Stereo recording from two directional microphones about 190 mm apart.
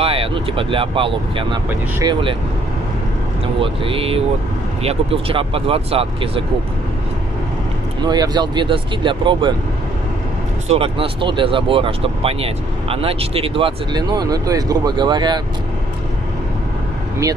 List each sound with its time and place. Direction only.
0.0 s speech: 30° right (ahead or behind)
1.7 s speech: 15° right (ahead or behind)
3.5 s speech: 30° right (ahead or behind)
8.0 s speech: 20° right (ahead or behind)
10.7 s speech: 30° right (ahead or behind)